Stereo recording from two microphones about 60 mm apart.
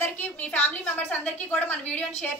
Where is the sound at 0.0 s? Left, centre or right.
Left.